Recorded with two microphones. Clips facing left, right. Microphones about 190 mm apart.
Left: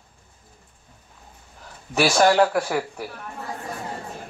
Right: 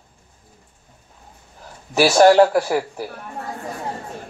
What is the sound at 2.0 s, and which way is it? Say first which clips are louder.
Speech: right 6 dB; 40° right (ahead or behind).